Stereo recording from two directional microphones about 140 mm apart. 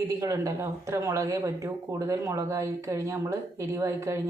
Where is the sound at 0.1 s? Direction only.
20° right (ahead or behind).